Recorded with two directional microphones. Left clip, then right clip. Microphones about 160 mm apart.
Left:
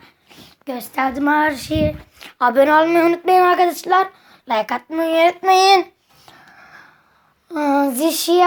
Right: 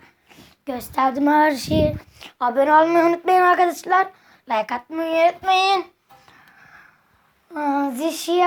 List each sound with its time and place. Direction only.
0.0 s a sound: 5° left (ahead or behind)
0.6 s a woman's voice: 15° right (ahead or behind)
1.4 s child singing: 25° right (ahead or behind)
2.4 s child singing: 25° left (ahead or behind)
2.7 s speech: 10° left (ahead or behind)
5.4 s child singing: 30° left (ahead or behind)
6.2 s dog: 30° left (ahead or behind)
7.5 s a sound: 30° left (ahead or behind)
7.9 s speech: 20° left (ahead or behind)